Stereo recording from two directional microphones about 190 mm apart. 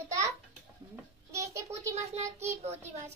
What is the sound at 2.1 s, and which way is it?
Speech, 35° right (ahead or behind).